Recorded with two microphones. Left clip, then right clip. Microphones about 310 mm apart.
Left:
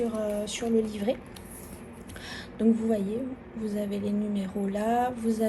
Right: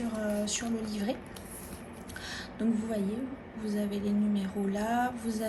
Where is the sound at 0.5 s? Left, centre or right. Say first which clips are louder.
Left 7 dB; centre.